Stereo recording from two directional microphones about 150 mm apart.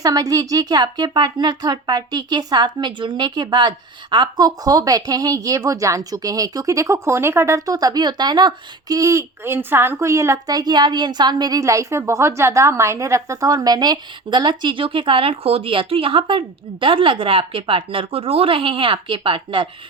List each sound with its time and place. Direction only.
0.0 s a woman's voice: 25° right (ahead or behind)